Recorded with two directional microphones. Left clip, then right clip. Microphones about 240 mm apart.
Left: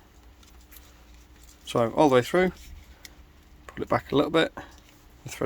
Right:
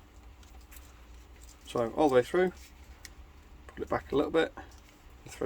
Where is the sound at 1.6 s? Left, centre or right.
Left.